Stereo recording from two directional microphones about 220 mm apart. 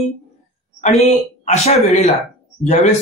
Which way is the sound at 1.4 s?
30° left (ahead or behind).